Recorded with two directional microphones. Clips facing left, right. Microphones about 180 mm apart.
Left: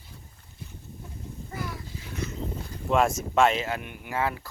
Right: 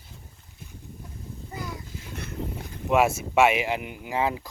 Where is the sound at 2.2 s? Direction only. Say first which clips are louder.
Left 8 dB; 60° right (ahead or behind).